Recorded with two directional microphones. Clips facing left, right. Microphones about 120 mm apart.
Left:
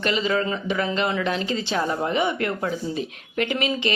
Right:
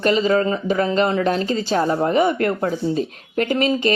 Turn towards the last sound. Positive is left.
turn(degrees=-40)  # may be behind; listen again after turning